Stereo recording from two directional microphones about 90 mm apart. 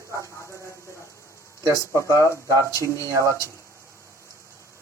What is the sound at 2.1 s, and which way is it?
Speech, 35° right (ahead or behind).